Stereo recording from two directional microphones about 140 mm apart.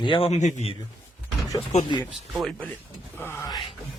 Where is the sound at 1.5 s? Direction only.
30° left (ahead or behind).